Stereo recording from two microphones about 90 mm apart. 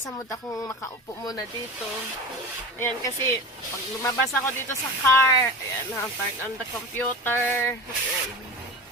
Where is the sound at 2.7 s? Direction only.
35° left (ahead or behind).